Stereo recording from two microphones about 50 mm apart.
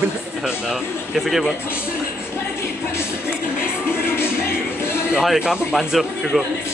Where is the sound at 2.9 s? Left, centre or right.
Left.